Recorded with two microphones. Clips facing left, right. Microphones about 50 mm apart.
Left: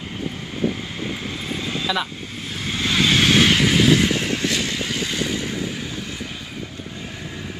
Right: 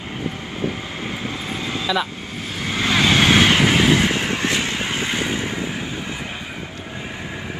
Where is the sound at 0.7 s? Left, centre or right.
Right.